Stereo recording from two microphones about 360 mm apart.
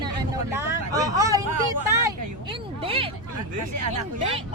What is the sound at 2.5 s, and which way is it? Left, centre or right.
Speech, centre.